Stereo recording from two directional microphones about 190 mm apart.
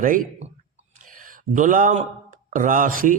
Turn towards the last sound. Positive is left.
turn(degrees=-45)  # may be behind; listen again after turning